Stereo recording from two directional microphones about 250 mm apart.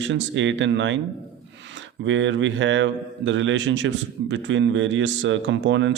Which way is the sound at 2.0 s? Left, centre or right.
Right.